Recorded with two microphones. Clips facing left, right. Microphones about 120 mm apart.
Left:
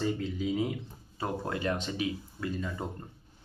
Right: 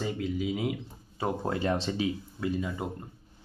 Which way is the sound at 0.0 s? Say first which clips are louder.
Even; 5° right (ahead or behind).